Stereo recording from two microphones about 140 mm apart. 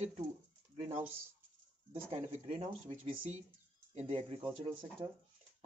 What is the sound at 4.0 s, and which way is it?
Speech, 50° right (ahead or behind).